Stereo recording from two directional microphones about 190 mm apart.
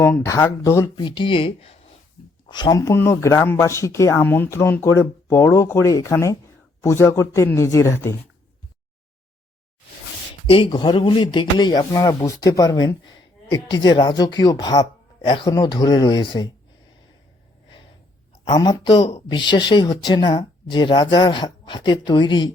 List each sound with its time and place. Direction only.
0.0 s speech: 10° left (ahead or behind)
10.5 s speech: 25° left (ahead or behind)
18.4 s speech: 25° left (ahead or behind)